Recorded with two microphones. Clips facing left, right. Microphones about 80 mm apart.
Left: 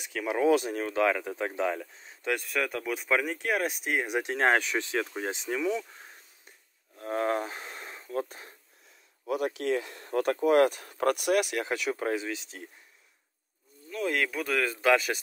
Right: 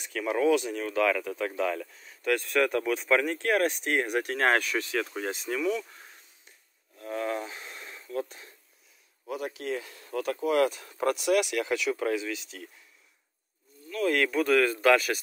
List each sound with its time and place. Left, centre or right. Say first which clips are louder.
0.0 s speech: right 1 dB; centre
0.5 s speech: left 1 dB; left
2.3 s speech: right 6 dB; centre; by 5.9 s left
7.0 s a sound: left 3 dB; left
9.6 s speech: left 4 dB; left
13.8 s speech: right 3 dB; centre